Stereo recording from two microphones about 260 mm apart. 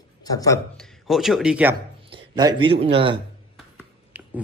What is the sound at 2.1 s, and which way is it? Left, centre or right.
Speech, centre.